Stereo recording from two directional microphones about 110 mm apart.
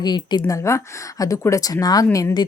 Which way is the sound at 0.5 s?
25° left (ahead or behind).